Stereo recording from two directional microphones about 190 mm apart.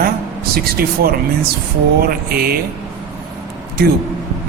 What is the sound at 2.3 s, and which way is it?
Speech, 55° right (ahead or behind).